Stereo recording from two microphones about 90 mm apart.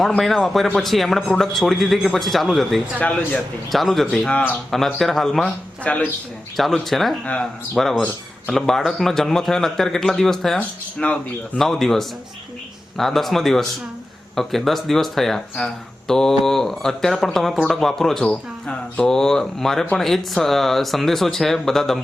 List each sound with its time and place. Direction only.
0.2 s speech: centre (ahead or behind)
3.0 s speech: 15° left (ahead or behind)
3.3 s speech: centre (ahead or behind)
4.3 s speech: 15° left (ahead or behind)
4.9 s speech: 5° left (ahead or behind)
5.8 s speech: 15° left (ahead or behind)
6.6 s speech: centre (ahead or behind)